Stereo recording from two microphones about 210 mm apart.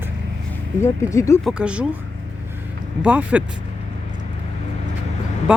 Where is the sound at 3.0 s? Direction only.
5° right (ahead or behind).